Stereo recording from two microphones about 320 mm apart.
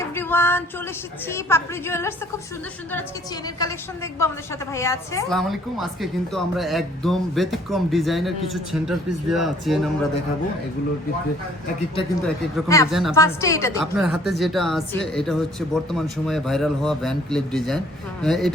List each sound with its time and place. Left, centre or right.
0.0 s a sound: centre
1.3 s a woman's voice: centre
3.6 s a woman's voice: centre
12.2 s a woman's voice: centre
12.9 s speech: centre
13.1 s a woman's voice: centre
13.9 s speech: centre